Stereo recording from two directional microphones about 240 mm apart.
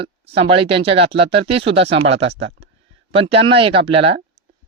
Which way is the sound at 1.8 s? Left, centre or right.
Right.